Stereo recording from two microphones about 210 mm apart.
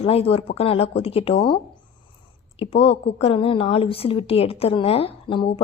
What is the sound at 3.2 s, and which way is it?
A woman's voice, 25° left (ahead or behind).